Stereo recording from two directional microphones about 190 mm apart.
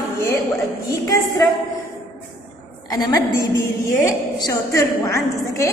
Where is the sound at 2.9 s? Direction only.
15° left (ahead or behind).